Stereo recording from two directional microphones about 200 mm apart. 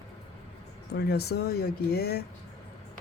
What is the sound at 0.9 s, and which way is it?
Speech, 55° left (ahead or behind).